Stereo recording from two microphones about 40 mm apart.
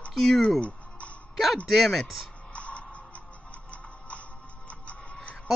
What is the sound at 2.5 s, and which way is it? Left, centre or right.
Music, left.